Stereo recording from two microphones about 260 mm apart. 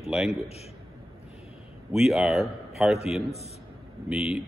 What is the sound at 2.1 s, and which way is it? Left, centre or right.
Speech, centre.